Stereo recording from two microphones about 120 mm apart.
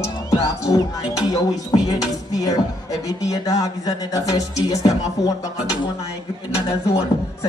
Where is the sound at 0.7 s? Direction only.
35° left (ahead or behind).